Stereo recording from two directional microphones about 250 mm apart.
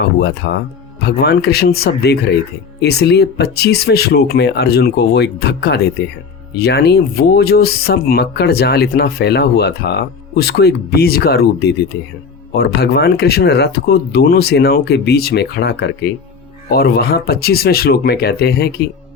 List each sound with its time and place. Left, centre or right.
0.2 s speech: left